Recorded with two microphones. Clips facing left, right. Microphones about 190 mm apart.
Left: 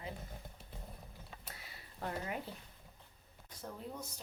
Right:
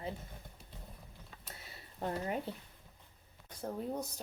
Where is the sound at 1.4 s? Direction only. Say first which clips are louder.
Right 1 dB; 25° right (ahead or behind).